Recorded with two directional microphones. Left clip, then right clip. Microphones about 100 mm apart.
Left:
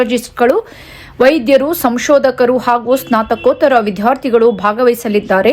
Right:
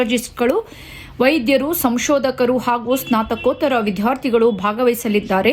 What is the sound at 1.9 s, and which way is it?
Speech, 50° left (ahead or behind).